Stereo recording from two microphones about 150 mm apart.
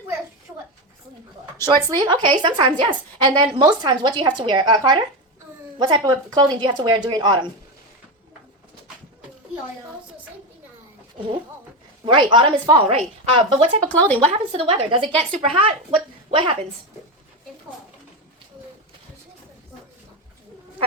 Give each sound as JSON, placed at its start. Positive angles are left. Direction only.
{"t": 1.7, "sound": "a woman's voice", "side_deg": -30}
{"t": 12.0, "sound": "a woman's voice", "side_deg": -30}
{"t": 13.8, "sound": "speech", "side_deg": 10}
{"t": 14.5, "sound": "a woman's voice", "side_deg": -40}
{"t": 15.1, "sound": "speech", "side_deg": 10}
{"t": 15.4, "sound": "a woman's voice", "side_deg": -40}